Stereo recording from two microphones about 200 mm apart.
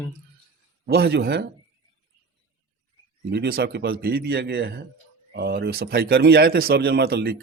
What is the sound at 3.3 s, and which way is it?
Speech, 50° right (ahead or behind).